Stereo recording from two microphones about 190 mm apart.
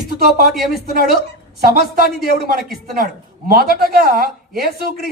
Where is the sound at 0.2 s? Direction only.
50° right (ahead or behind).